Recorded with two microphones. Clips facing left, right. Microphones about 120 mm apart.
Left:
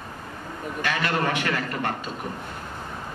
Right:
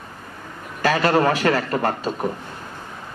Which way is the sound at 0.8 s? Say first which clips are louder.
Right 8 dB; 35° right (ahead or behind).